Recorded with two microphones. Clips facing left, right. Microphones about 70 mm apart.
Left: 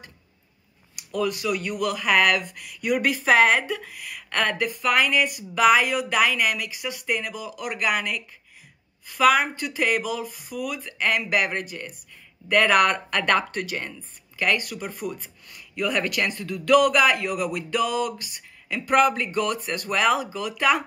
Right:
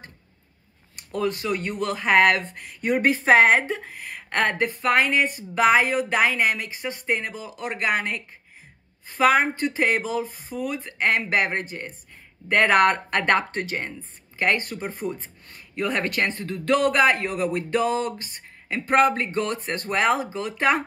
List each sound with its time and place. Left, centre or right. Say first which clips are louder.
1.1 s speech: even; right